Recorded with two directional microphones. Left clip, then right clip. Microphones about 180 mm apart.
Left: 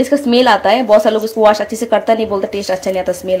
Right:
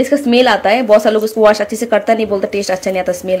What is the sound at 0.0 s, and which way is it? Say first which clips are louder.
Speech: even; 5° right (ahead or behind).